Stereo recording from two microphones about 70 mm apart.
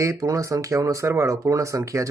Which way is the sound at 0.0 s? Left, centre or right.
Right.